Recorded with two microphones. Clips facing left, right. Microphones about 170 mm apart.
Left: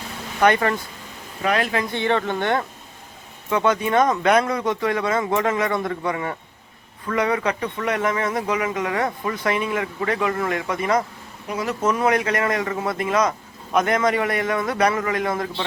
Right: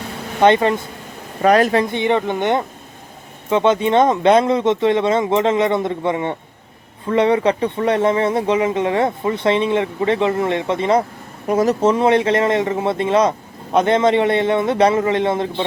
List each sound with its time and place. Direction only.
0.3 s speech: 25° right (ahead or behind)
1.4 s speech: 40° right (ahead or behind)
1.8 s speech: 20° right (ahead or behind)
11.4 s speech: 45° right (ahead or behind); by 15.6 s 25° right (ahead or behind)